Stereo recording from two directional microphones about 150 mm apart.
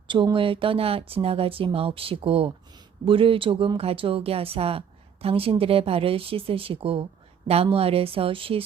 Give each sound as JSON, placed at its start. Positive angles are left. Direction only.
{"t": 0.1, "sound": "speech", "side_deg": -35}